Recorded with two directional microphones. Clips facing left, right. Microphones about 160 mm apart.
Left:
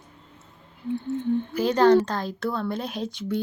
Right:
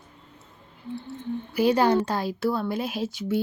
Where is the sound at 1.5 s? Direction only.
10° right (ahead or behind).